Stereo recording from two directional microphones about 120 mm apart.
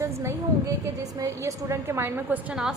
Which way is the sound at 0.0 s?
20° right (ahead or behind).